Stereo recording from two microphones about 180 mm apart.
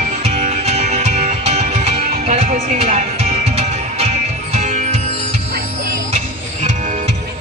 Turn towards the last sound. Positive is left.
turn(degrees=-40)  # may be behind; listen again after turning